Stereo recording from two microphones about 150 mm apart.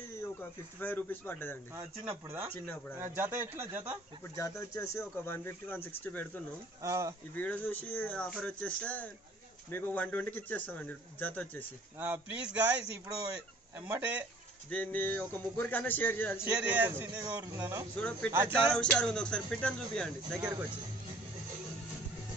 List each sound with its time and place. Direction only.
0.2 s speech: 15° left (ahead or behind)
2.2 s a man's voice: 15° right (ahead or behind)
4.4 s speech: 20° left (ahead or behind)
6.8 s speech: 20° right (ahead or behind)
7.3 s speech: 10° left (ahead or behind)
12.0 s a man's voice: 10° right (ahead or behind)
14.7 s speech: 10° left (ahead or behind)
16.6 s a man's voice: 10° right (ahead or behind)
18.8 s speech: 5° left (ahead or behind)
20.3 s speech: 25° right (ahead or behind)